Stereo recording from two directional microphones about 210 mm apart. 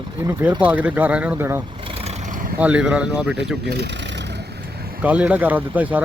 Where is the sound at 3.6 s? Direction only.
50° right (ahead or behind).